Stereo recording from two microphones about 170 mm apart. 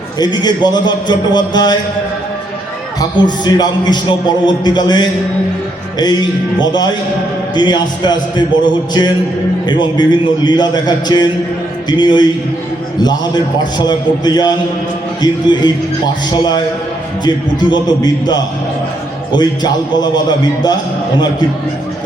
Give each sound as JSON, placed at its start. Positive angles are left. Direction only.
{"t": 0.2, "sound": "a man's voice", "side_deg": 25}
{"t": 3.0, "sound": "a man's voice", "side_deg": 25}